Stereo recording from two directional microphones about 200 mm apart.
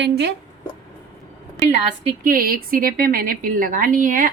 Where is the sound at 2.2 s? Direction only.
45° right (ahead or behind).